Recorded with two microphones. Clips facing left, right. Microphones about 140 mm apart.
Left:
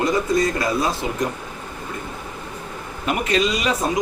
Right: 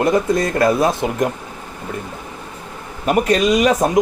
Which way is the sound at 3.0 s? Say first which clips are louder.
Right 6 dB; 45° right (ahead or behind).